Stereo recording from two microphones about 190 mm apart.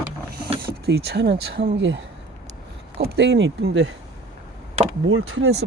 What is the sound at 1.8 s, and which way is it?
Speech, 80° right.